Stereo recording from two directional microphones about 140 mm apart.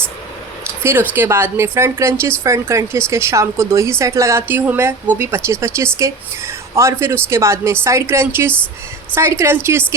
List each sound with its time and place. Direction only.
0.8 s a woman's voice: 15° right (ahead or behind)